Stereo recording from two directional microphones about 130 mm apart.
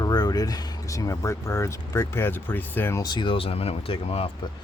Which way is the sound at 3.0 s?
35° left (ahead or behind).